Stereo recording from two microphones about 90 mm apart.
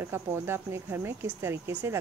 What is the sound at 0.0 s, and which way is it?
Speech, 25° right (ahead or behind).